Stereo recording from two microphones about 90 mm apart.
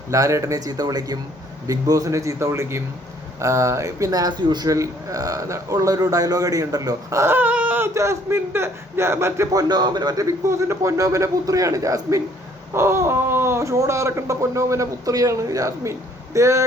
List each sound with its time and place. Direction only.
0.1 s a man's voice: 35° right (ahead or behind); by 4.7 s 55° right (ahead or behind)
4.7 s a man's voice: 40° right (ahead or behind)
7.3 s a sound: 15° right (ahead or behind)
7.9 s a man's voice: 30° right (ahead or behind)